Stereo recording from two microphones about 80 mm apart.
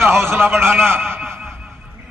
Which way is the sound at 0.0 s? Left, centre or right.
Right.